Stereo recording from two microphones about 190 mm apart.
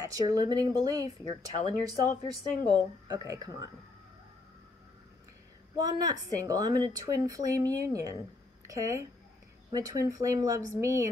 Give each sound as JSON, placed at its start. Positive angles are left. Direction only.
{"t": 0.0, "sound": "a woman's voice", "side_deg": -20}
{"t": 5.8, "sound": "a woman's voice", "side_deg": -20}